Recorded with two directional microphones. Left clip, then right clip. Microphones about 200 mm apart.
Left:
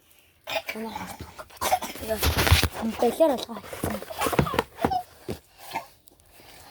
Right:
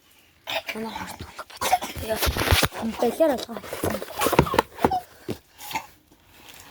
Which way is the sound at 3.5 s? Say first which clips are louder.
Right 4 dB; 55° right (ahead or behind).